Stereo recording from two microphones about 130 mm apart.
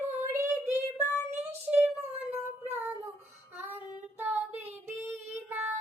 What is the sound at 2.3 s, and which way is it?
Child singing, 15° right (ahead or behind).